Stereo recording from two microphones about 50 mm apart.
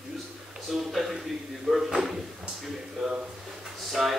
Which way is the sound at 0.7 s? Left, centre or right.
Centre.